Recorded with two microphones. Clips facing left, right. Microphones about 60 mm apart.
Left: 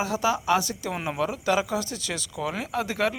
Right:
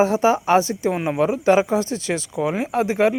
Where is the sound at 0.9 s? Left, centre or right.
Centre.